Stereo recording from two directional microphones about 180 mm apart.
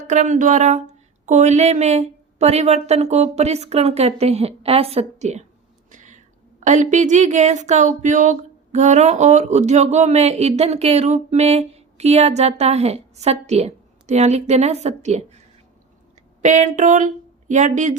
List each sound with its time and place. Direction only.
0.1 s speech: 40° right (ahead or behind)
5.9 s cat: 45° right (ahead or behind)
6.7 s speech: 40° right (ahead or behind)
16.4 s speech: 40° right (ahead or behind)